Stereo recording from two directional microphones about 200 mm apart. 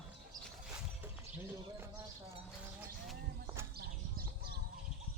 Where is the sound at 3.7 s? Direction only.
50° right (ahead or behind).